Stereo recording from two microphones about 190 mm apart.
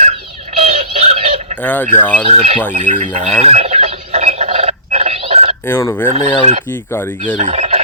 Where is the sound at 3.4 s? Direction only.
35° right (ahead or behind).